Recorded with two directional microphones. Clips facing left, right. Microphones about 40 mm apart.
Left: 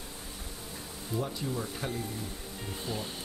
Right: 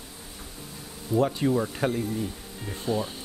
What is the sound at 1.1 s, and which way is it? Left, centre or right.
Speech, right.